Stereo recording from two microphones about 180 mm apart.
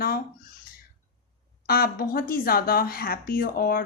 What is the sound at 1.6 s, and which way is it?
A woman's voice, 55° left (ahead or behind).